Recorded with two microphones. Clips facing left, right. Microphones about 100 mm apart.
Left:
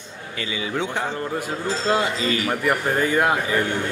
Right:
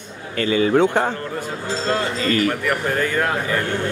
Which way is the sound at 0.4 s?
50° right (ahead or behind).